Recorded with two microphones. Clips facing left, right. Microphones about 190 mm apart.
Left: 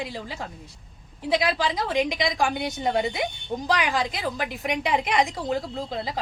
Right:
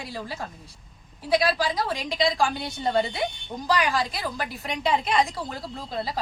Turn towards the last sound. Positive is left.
turn(degrees=15)  # may be behind; listen again after turning